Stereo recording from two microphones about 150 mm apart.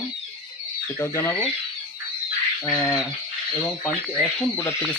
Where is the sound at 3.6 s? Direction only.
5° left (ahead or behind).